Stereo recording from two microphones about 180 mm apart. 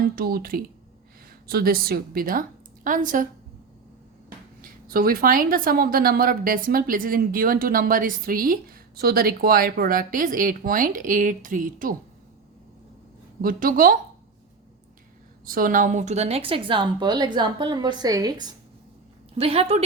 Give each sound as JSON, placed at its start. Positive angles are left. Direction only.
{"t": 0.2, "sound": "speech", "side_deg": -55}
{"t": 4.6, "sound": "speech", "side_deg": -55}
{"t": 13.4, "sound": "speech", "side_deg": -50}
{"t": 15.4, "sound": "a woman's voice", "side_deg": -50}
{"t": 19.4, "sound": "speech", "side_deg": -35}